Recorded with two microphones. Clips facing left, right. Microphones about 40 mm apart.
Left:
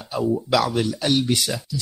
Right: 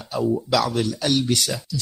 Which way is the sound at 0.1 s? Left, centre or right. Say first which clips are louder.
Even; centre.